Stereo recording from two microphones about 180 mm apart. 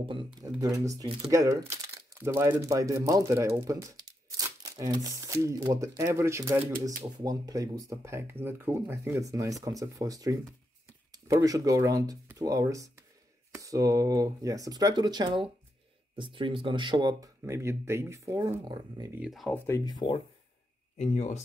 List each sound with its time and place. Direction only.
0.0 s speech: 30° right (ahead or behind)
6.7 s speech: 50° right (ahead or behind)
7.2 s speech: 20° right (ahead or behind)
19.1 s speech: 5° right (ahead or behind)
19.6 s speech: 20° left (ahead or behind)
21.0 s speech: 40° left (ahead or behind)